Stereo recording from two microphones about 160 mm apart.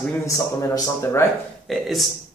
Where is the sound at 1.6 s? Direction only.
Centre (ahead or behind).